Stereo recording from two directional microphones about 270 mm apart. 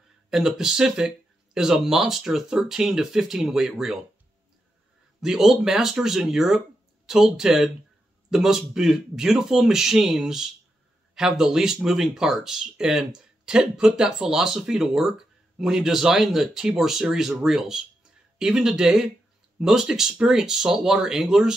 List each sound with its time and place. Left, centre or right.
0.3 s speech: centre
5.2 s speech: centre